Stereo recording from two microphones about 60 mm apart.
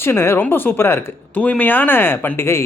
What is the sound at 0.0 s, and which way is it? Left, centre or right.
Speech, left.